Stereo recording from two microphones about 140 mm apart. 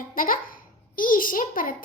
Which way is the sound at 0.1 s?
80° left.